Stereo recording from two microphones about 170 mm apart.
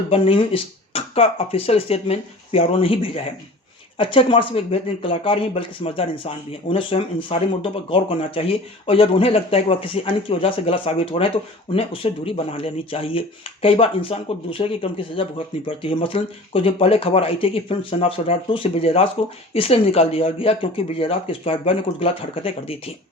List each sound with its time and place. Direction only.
0.1 s speech: 30° left (ahead or behind)